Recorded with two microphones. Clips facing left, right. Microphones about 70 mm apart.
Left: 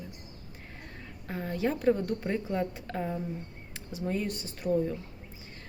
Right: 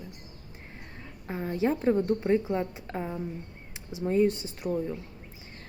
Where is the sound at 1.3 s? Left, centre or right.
Right.